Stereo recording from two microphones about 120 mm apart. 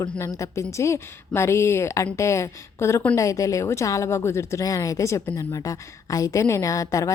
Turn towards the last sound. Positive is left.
turn(degrees=30)  # may be behind; listen again after turning